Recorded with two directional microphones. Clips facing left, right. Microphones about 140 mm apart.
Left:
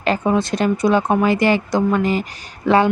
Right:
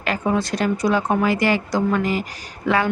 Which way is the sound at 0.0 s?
25° left (ahead or behind).